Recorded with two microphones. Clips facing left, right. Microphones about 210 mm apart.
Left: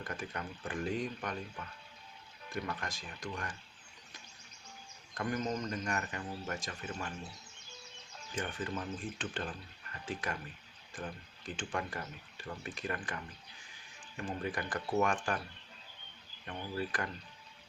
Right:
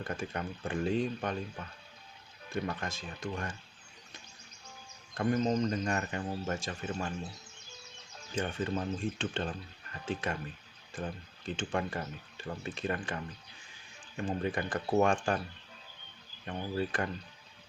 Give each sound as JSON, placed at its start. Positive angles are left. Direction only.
{"t": 0.0, "sound": "speech", "side_deg": -25}
{"t": 2.5, "sound": "speech", "side_deg": -25}
{"t": 5.1, "sound": "speech", "side_deg": -25}
{"t": 8.3, "sound": "speech", "side_deg": -25}
{"t": 16.7, "sound": "speech", "side_deg": -25}